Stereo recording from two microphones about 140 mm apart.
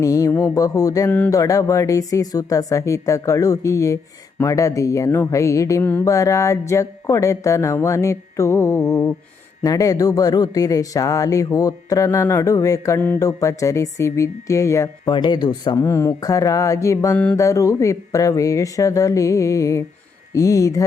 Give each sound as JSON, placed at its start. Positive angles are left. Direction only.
{"t": 0.0, "sound": "speech", "side_deg": 25}
{"t": 15.0, "sound": "speech", "side_deg": 35}